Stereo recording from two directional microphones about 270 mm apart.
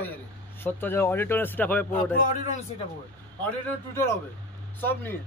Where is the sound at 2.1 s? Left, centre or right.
Left.